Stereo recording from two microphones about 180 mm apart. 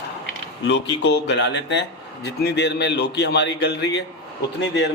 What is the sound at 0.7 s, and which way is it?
A man's voice, 70° left (ahead or behind).